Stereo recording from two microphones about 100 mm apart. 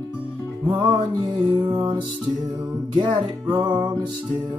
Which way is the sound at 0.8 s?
45° right (ahead or behind).